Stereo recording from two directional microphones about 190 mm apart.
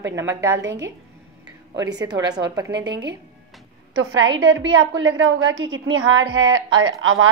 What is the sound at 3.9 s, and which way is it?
A woman's voice, 90° right.